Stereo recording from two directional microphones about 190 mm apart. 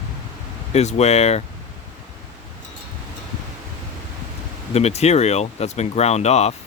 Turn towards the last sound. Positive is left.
turn(degrees=35)  # may be behind; listen again after turning